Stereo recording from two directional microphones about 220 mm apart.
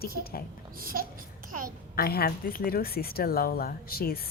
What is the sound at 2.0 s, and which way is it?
Speech, 45° left (ahead or behind).